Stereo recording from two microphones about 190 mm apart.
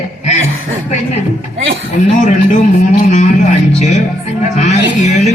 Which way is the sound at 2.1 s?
40° left (ahead or behind).